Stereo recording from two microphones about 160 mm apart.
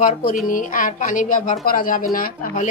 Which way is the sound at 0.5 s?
55° left (ahead or behind).